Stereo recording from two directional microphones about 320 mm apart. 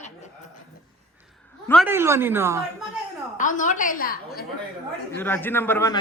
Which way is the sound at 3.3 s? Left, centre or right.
Left.